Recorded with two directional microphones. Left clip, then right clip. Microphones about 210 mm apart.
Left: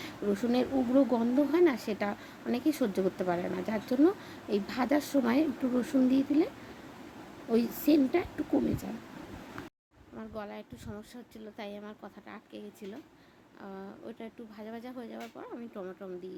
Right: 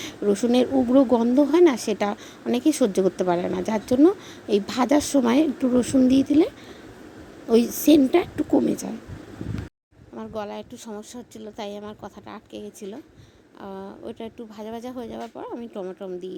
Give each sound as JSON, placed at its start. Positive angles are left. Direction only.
{"t": 0.0, "sound": "speech", "side_deg": -30}
{"t": 7.8, "sound": "speech", "side_deg": -35}
{"t": 10.2, "sound": "speech", "side_deg": -30}